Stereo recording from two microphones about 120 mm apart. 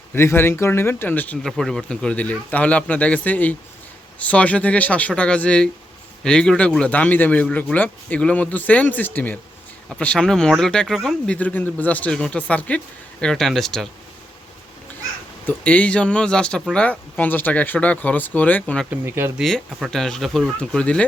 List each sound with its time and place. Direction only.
0.1 s speech: 20° left (ahead or behind)
1.5 s speech: 5° left (ahead or behind)
15.4 s speech: 10° left (ahead or behind)
18.9 s speech: 20° right (ahead or behind)
19.4 s speech: centre (ahead or behind)